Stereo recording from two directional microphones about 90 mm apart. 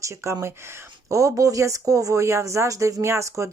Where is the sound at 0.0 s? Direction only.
35° right (ahead or behind).